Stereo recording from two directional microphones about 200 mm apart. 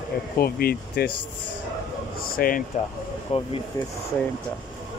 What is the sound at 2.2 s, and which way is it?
Speech, 45° left (ahead or behind).